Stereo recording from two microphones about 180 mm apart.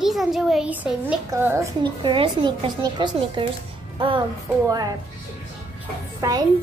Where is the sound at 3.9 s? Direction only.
25° right (ahead or behind).